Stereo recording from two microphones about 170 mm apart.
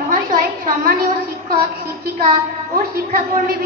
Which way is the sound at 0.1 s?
55° right (ahead or behind).